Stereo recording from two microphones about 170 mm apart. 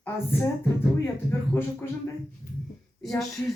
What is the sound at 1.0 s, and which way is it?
Speech, 15° left (ahead or behind).